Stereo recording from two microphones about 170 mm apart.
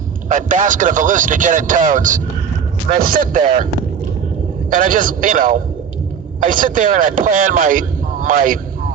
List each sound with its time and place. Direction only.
0.3 s speech: 50° right (ahead or behind)
4.7 s speech: 50° right (ahead or behind)